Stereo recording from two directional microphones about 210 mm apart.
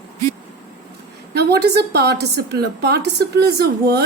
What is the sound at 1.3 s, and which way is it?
A woman's voice, 50° right (ahead or behind).